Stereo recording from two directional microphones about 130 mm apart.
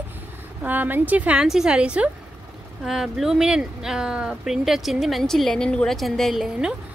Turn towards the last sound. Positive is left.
turn(degrees=-5)  # may be behind; listen again after turning